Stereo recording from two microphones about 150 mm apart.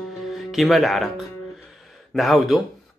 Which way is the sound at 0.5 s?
Centre (ahead or behind).